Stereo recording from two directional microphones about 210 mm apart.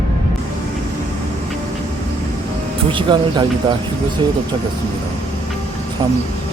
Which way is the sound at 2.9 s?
20° right (ahead or behind).